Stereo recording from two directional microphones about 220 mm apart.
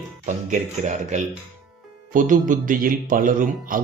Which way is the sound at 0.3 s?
35° right (ahead or behind).